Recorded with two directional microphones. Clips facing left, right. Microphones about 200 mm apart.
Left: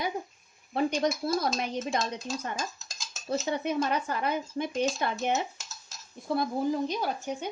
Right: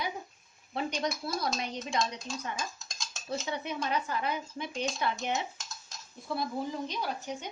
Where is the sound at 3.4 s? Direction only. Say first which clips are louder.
Left 7 dB; 50° left (ahead or behind).